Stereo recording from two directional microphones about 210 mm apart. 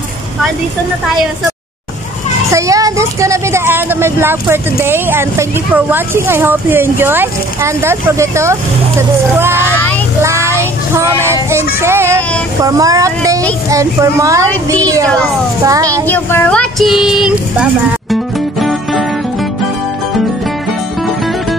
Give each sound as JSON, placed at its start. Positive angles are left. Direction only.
{"t": 2.5, "sound": "a woman's voice", "side_deg": -15}
{"t": 9.7, "sound": "vehicle", "side_deg": 5}
{"t": 10.2, "sound": "child singing", "side_deg": -15}
{"t": 11.5, "sound": "a woman's voice", "side_deg": -10}
{"t": 15.6, "sound": "a woman's voice", "side_deg": -15}
{"t": 16.1, "sound": "speech", "side_deg": 10}
{"t": 18.1, "sound": "music", "side_deg": 0}